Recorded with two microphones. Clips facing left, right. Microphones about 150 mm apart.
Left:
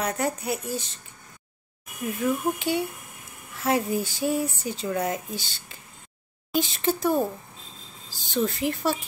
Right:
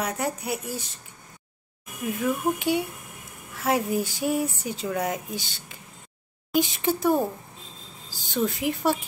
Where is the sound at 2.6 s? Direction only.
10° right (ahead or behind).